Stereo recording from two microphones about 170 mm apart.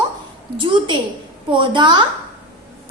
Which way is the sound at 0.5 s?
30° right (ahead or behind).